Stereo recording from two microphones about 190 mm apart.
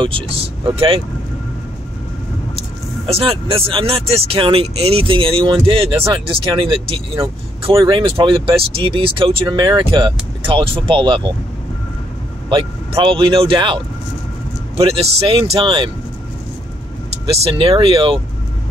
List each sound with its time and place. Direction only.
0.0 s speech: 30° right (ahead or behind)
3.1 s speech: 30° right (ahead or behind)
12.4 s speech: 25° right (ahead or behind)
14.8 s speech: 30° right (ahead or behind)
17.3 s speech: 30° right (ahead or behind)